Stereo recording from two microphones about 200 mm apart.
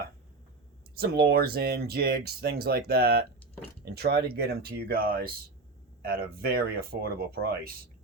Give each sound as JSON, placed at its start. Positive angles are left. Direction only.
{"t": 0.9, "sound": "speech", "side_deg": -50}